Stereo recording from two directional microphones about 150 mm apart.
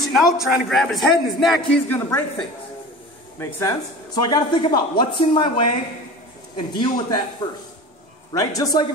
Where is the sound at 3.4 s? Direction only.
20° left (ahead or behind).